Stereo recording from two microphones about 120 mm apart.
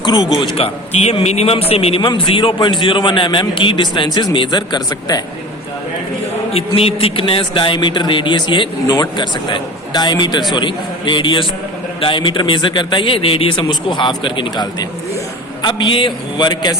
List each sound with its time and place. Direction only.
0.0 s a man's voice: 35° left (ahead or behind)
0.3 s a man's voice: 50° left (ahead or behind)
2.0 s speech: 40° left (ahead or behind)
6.5 s a man's voice: 55° left (ahead or behind); by 16.7 s 35° left (ahead or behind)